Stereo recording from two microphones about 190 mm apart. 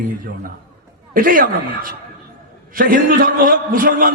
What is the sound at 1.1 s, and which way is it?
A man's voice, 50° right (ahead or behind).